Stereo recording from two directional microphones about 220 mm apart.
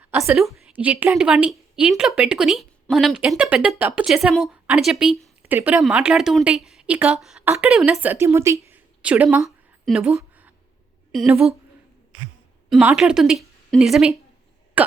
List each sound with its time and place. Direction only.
0.0 s a woman's voice: 10° right (ahead or behind)
12.7 s a woman's voice: 5° right (ahead or behind)